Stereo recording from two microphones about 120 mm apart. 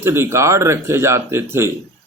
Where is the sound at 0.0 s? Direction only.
20° right (ahead or behind).